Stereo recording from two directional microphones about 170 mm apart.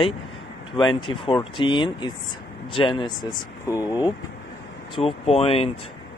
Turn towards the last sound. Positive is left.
turn(degrees=35)  # may be behind; listen again after turning